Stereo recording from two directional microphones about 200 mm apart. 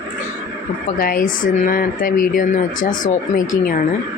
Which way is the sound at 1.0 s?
45° left (ahead or behind).